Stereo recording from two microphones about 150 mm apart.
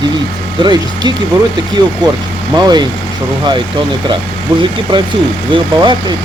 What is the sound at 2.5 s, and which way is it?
Speech, 25° right (ahead or behind).